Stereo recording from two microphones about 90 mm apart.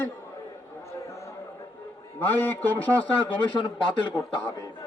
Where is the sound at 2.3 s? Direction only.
20° left (ahead or behind).